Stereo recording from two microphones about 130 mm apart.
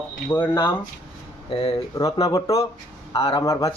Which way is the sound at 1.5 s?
45° left (ahead or behind).